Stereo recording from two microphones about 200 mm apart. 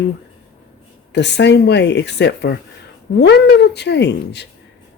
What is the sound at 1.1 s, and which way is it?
Speech, 60° left (ahead or behind).